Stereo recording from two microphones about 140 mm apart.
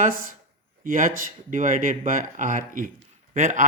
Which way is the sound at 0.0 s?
80° right.